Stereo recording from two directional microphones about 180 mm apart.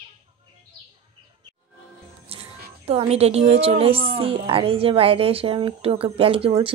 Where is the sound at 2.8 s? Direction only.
35° right (ahead or behind).